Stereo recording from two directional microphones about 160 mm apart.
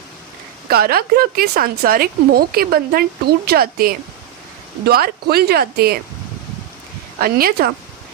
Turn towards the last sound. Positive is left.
turn(degrees=-65)  # may be behind; listen again after turning